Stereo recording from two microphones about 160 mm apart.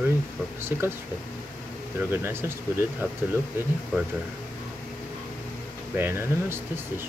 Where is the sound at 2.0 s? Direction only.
15° right (ahead or behind).